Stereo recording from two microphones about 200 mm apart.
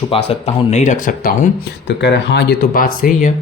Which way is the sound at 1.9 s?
60° left (ahead or behind).